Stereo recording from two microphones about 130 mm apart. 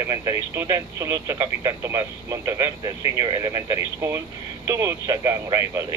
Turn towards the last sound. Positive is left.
turn(degrees=-25)  # may be behind; listen again after turning